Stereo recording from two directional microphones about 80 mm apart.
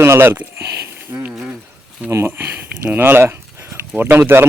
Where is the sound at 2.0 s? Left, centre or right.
Right.